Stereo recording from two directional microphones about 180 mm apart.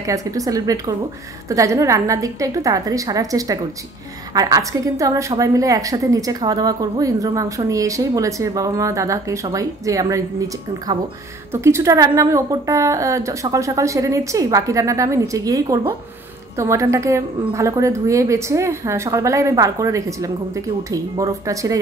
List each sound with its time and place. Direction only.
0.0 s a woman's voice: 20° right (ahead or behind)
11.5 s a woman's voice: 15° right (ahead or behind)